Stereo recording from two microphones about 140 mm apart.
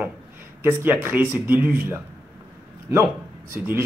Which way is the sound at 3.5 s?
15° right (ahead or behind).